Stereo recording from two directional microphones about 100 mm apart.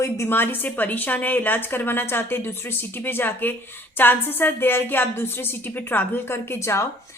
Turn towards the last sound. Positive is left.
turn(degrees=25)  # may be behind; listen again after turning